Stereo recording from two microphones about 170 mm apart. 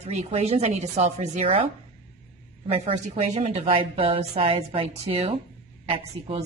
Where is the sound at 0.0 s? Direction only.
40° right (ahead or behind).